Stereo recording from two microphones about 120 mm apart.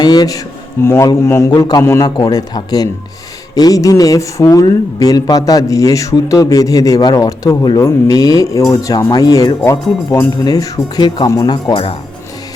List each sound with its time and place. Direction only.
0.0 s speech: 35° left (ahead or behind)